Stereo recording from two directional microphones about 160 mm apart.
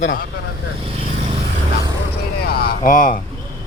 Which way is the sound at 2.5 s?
75° left (ahead or behind).